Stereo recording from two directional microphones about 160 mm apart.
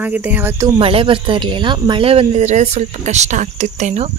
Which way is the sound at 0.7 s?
35° right (ahead or behind).